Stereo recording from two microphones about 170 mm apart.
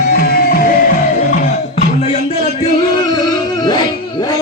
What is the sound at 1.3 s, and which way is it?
Music, 45° left (ahead or behind).